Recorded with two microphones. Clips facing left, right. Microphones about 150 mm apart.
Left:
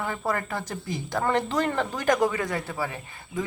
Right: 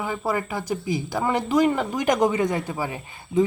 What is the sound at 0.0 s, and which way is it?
Speech, 10° right (ahead or behind).